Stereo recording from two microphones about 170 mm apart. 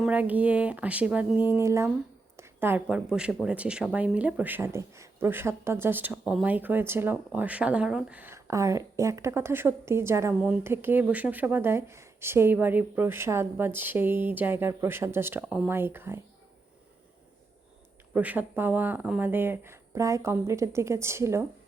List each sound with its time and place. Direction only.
0.0 s speech: 10° right (ahead or behind)
18.1 s speech: 10° right (ahead or behind)